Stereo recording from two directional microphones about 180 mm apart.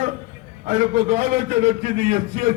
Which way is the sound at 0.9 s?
35° right (ahead or behind).